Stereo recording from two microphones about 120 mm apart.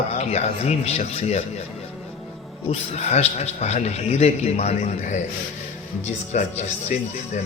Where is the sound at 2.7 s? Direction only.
65° left (ahead or behind).